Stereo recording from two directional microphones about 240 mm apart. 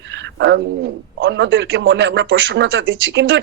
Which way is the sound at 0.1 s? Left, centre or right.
Right.